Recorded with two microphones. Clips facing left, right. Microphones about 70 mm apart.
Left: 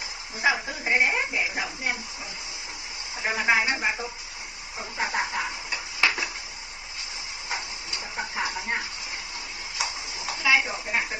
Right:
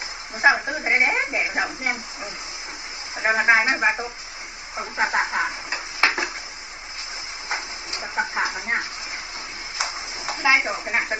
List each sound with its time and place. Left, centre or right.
0.4 s a woman's voice: right
3.2 s a woman's voice: right
5.7 s tick-tock: right
8.1 s chicken: right
9.7 s a sound: right